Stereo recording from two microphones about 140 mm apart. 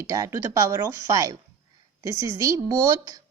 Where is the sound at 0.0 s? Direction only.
25° right (ahead or behind).